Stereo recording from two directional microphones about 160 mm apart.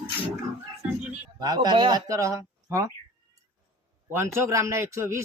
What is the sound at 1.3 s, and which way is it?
A man's voice, 25° right (ahead or behind).